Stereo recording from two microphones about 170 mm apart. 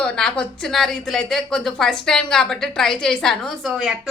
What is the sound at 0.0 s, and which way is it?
A woman's voice, 5° left (ahead or behind).